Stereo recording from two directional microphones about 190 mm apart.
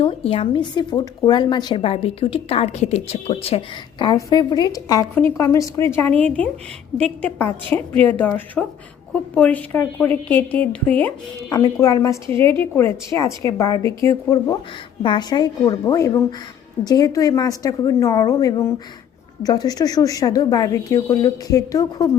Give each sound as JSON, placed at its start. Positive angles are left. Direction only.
{"t": 0.0, "sound": "a woman's voice", "side_deg": 30}
{"t": 8.6, "sound": "a woman's voice", "side_deg": 0}